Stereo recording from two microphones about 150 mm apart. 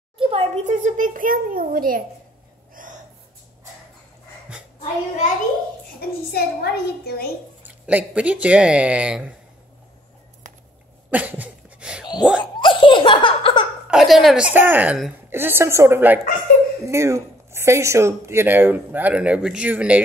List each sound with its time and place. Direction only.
0.2 s a sound: 40° right (ahead or behind)
0.7 s a child's voice: 60° right (ahead or behind)
2.7 s gasp: 60° right (ahead or behind)
4.7 s a child's voice: 50° left (ahead or behind)
5.9 s a child's voice: 90° left
7.6 s speech: 10° right (ahead or behind)
11.1 s cough: 10° right (ahead or behind)
12.4 s laughter: 30° left (ahead or behind)
13.8 s speech: centre (ahead or behind)